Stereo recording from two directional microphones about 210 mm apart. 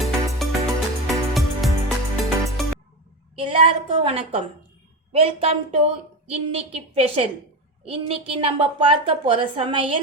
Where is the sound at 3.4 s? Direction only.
25° right (ahead or behind).